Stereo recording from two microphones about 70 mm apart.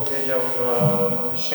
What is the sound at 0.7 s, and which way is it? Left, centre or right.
Mantra, centre.